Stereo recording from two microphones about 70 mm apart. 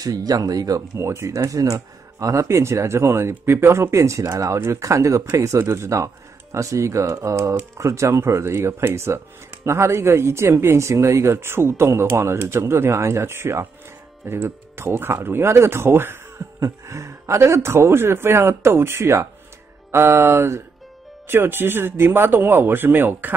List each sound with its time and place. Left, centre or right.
0.0 s speech: right
16.5 s speech: right